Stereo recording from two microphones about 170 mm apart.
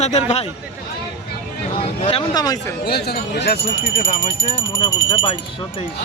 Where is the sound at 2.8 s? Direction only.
70° left (ahead or behind).